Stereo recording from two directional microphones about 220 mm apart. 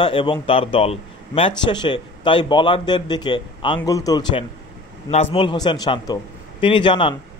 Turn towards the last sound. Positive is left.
turn(degrees=25)  # may be behind; listen again after turning